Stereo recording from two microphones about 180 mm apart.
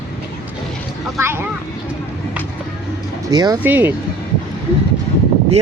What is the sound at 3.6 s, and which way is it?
Speech, 10° right (ahead or behind).